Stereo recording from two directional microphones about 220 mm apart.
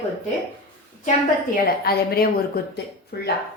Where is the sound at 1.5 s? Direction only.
45° left (ahead or behind).